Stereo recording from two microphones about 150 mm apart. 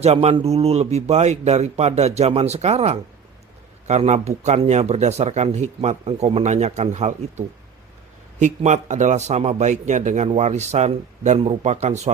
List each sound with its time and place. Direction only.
0.0 s speech: 45° right (ahead or behind)